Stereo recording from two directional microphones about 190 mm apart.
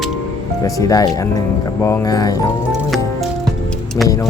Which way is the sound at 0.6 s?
20° left (ahead or behind).